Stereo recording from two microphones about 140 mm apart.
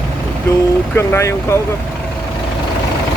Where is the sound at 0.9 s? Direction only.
15° left (ahead or behind).